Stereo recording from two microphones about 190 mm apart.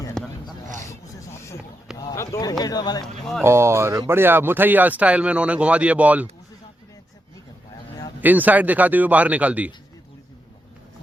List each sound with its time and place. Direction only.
0.1 s a sound: 5° left (ahead or behind)
2.0 s speech: 20° left (ahead or behind)
3.4 s speech: 15° right (ahead or behind)
8.2 s speech: 10° right (ahead or behind)